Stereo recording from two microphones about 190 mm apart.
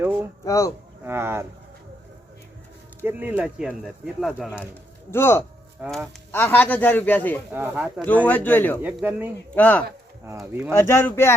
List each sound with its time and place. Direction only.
0.0 s speech: 10° right (ahead or behind)
0.4 s a man's voice: 15° left (ahead or behind)
1.0 s speech: 10° right (ahead or behind)
3.0 s speech: 10° right (ahead or behind)
4.7 s speech: 15° left (ahead or behind)
5.8 s speech: 5° right (ahead or behind)
6.3 s a man's voice: 10° left (ahead or behind)
7.5 s speech: 10° right (ahead or behind)
8.0 s a man's voice: 10° left (ahead or behind)
8.8 s speech: 10° right (ahead or behind)
9.6 s a man's voice: 10° left (ahead or behind)
10.3 s speech: 10° right (ahead or behind)
10.7 s a man's voice: 10° left (ahead or behind)